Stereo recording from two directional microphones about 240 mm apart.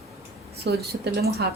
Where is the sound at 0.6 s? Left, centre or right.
Right.